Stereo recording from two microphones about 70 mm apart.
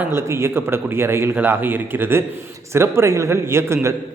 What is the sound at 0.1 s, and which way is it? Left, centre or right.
A man's voice, right.